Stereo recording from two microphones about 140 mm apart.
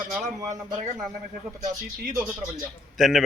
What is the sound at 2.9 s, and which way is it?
Speech, centre (ahead or behind).